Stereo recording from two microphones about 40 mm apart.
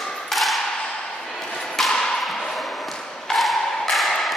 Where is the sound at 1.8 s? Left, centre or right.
Centre.